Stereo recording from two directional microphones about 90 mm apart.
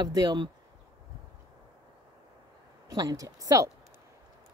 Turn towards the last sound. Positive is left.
turn(degrees=-40)  # may be behind; listen again after turning